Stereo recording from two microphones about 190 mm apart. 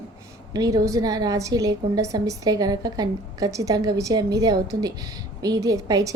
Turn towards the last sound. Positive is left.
turn(degrees=-20)  # may be behind; listen again after turning